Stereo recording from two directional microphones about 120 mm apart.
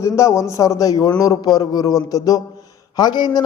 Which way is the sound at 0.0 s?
25° left (ahead or behind).